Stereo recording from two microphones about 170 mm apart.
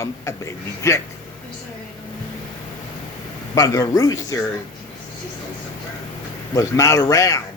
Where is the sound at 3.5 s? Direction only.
20° left (ahead or behind).